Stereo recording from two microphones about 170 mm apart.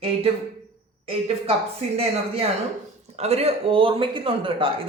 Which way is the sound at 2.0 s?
35° right (ahead or behind).